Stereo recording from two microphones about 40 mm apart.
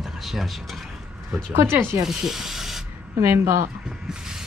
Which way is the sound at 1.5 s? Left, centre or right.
Right.